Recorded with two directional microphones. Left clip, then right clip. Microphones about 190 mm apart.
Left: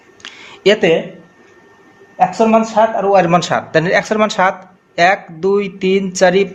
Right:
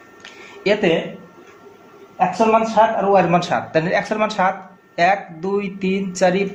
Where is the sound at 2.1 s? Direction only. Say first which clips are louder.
Left 4 dB; 65° left (ahead or behind).